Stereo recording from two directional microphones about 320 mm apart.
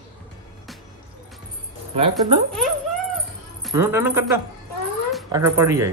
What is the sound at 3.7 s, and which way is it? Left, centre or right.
Speech, centre.